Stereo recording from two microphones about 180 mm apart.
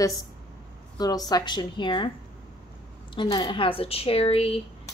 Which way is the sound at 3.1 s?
25° left (ahead or behind).